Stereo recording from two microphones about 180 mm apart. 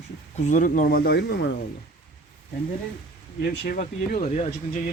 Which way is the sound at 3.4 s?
65° left (ahead or behind).